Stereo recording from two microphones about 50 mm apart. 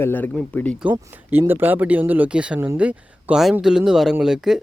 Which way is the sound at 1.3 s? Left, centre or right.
Right.